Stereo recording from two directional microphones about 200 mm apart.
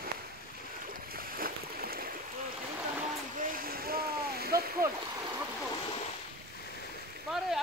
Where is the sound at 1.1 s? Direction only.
45° right (ahead or behind).